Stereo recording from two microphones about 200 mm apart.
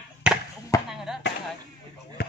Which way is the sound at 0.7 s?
15° left (ahead or behind).